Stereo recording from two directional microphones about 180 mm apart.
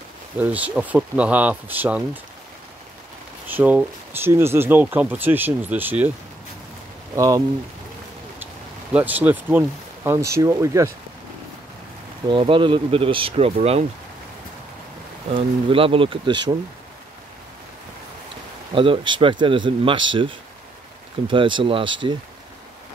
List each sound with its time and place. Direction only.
0.4 s speech: 10° right (ahead or behind)
3.4 s speech: 10° right (ahead or behind)
7.2 s speech: 20° right (ahead or behind)
8.9 s speech: 10° right (ahead or behind)
12.3 s speech: 30° right (ahead or behind)
15.3 s speech: 30° right (ahead or behind)
18.8 s speech: 30° right (ahead or behind)
21.3 s speech: 25° right (ahead or behind)